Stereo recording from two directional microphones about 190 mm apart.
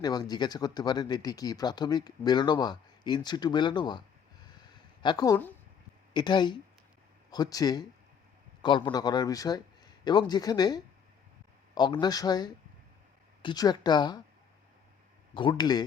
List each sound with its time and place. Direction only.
0.0 s speech: 20° left (ahead or behind)
4.4 s a sound: 20° left (ahead or behind)
6.1 s speech: 25° left (ahead or behind)
15.4 s speech: 20° left (ahead or behind)